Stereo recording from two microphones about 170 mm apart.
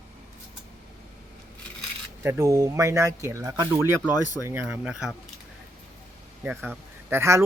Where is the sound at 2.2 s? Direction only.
15° right (ahead or behind).